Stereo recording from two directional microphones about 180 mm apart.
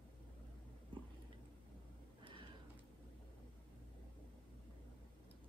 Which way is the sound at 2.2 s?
30° right (ahead or behind).